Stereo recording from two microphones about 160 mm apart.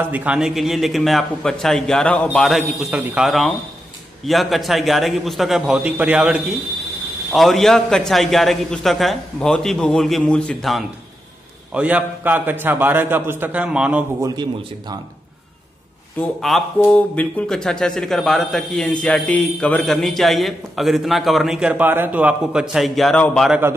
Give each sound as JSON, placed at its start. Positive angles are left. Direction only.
{"t": 0.1, "sound": "a man's voice", "side_deg": -10}
{"t": 2.9, "sound": "a man's voice", "side_deg": -10}
{"t": 3.3, "sound": "a man's voice", "side_deg": 0}
{"t": 14.2, "sound": "speech", "side_deg": -25}
{"t": 16.2, "sound": "a man's voice", "side_deg": 0}